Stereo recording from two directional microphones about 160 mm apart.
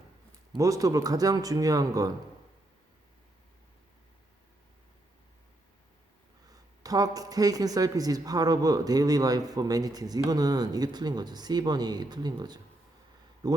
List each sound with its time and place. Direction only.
0.5 s speech: 20° right (ahead or behind)
6.5 s speech: 20° right (ahead or behind)